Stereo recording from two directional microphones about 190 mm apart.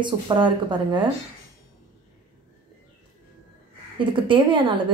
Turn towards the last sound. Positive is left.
turn(degrees=-25)  # may be behind; listen again after turning